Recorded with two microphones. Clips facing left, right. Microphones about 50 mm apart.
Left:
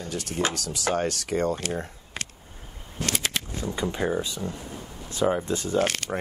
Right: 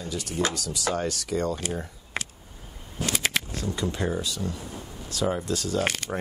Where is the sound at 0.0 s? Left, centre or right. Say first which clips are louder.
Even; left.